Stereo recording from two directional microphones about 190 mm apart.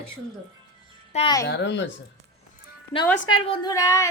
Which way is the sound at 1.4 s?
65° left (ahead or behind).